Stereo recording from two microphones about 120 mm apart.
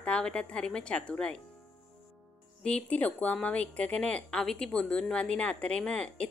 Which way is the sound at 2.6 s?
10° left (ahead or behind).